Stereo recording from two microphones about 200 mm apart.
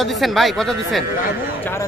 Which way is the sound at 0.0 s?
Centre (ahead or behind).